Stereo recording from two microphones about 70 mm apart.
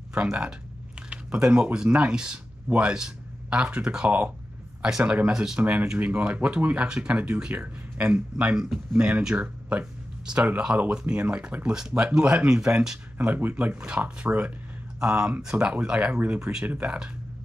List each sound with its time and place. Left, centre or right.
0.1 s speech: centre
5.3 s speech: centre
5.6 s speech: right
13.2 s speech: right